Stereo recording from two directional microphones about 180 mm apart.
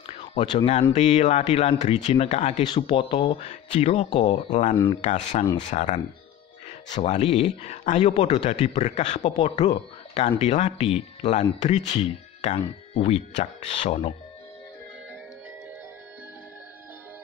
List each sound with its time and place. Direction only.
0.0 s a sound: 40° left (ahead or behind)
0.5 s speech: 25° left (ahead or behind)
0.9 s speech: 40° left (ahead or behind)
2.6 s speech: 25° left (ahead or behind)
4.3 s speech: 40° left (ahead or behind)